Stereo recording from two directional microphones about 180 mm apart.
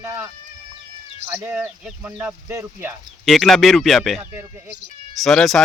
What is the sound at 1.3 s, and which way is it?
Speech, 10° right (ahead or behind).